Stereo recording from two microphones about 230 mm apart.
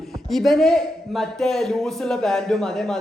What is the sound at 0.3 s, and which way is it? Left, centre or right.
A man's voice, centre.